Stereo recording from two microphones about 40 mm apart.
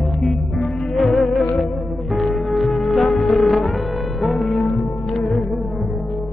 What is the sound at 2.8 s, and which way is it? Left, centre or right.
Music, centre.